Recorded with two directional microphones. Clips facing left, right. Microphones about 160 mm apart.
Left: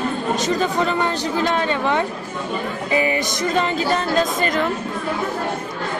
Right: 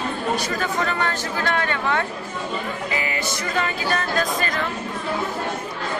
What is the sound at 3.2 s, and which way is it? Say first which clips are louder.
Speech: left 4 dB; 20° left (ahead or behind).